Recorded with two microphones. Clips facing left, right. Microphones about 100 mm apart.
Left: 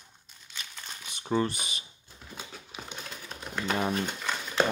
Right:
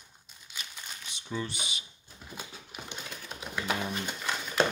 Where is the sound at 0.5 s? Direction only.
10° right (ahead or behind).